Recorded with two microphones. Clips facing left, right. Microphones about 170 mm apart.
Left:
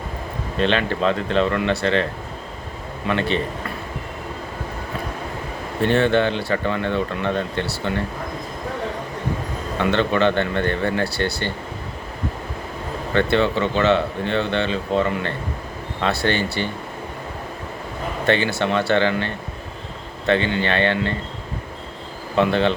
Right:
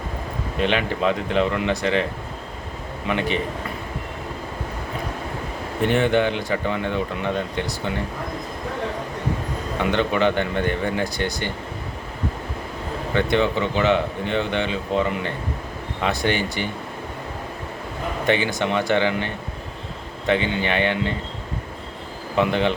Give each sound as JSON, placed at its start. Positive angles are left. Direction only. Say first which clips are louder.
{"t": 0.6, "sound": "speech", "louder": "left 2 dB", "side_deg": -15}
{"t": 3.1, "sound": "speech", "louder": "left 2 dB", "side_deg": -15}
{"t": 5.8, "sound": "speech", "louder": "left 1 dB", "side_deg": -15}
{"t": 9.7, "sound": "speech", "louder": "left 2 dB", "side_deg": -15}
{"t": 13.1, "sound": "speech", "louder": "left 2 dB", "side_deg": -15}
{"t": 18.3, "sound": "speech", "louder": "left 2 dB", "side_deg": -15}
{"t": 22.4, "sound": "speech", "louder": "left 2 dB", "side_deg": -15}